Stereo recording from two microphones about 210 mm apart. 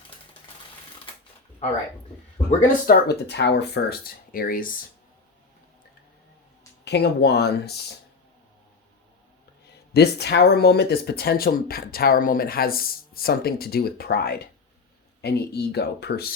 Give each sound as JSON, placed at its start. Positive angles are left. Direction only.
{"t": 2.5, "sound": "speech", "side_deg": 40}
{"t": 6.8, "sound": "speech", "side_deg": 55}
{"t": 9.9, "sound": "speech", "side_deg": 50}